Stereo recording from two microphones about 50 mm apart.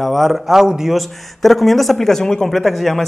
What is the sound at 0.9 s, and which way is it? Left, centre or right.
Speech, centre.